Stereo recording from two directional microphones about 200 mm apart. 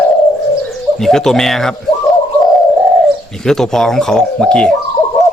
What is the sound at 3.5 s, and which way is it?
Speech, centre (ahead or behind).